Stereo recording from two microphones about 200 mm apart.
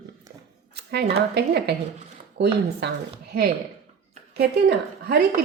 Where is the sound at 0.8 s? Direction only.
55° right (ahead or behind).